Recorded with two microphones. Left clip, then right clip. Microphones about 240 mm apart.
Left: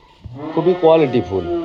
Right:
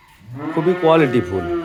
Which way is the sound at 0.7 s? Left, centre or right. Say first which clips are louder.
Left 2 dB; centre.